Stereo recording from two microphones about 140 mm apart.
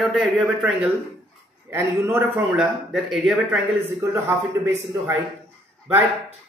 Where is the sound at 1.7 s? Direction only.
20° right (ahead or behind).